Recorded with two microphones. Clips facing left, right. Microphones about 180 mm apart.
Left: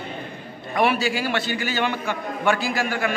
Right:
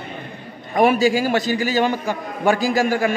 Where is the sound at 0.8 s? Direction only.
45° right (ahead or behind).